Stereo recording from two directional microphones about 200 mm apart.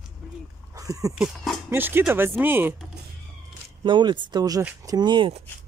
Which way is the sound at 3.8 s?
25° right (ahead or behind).